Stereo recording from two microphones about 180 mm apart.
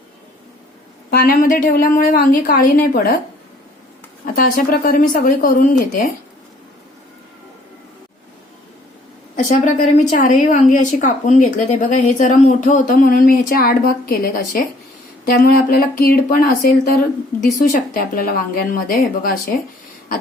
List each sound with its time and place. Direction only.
1.1 s a woman's voice: 55° left (ahead or behind)
4.4 s a woman's voice: 50° left (ahead or behind)
9.3 s a woman's voice: 45° left (ahead or behind)